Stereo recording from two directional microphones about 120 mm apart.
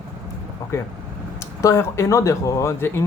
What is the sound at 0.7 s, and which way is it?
Speech, 20° left (ahead or behind).